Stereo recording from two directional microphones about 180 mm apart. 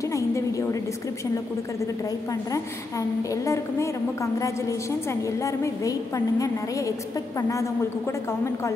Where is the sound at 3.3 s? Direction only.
15° left (ahead or behind).